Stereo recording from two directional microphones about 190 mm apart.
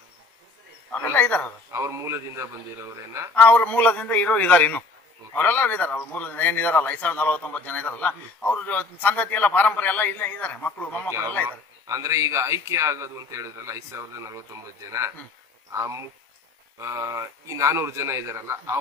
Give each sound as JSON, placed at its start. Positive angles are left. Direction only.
{"t": 0.9, "sound": "a man's voice", "side_deg": 10}
{"t": 1.7, "sound": "speech", "side_deg": -15}
{"t": 3.3, "sound": "speech", "side_deg": 10}
{"t": 11.4, "sound": "speech", "side_deg": -15}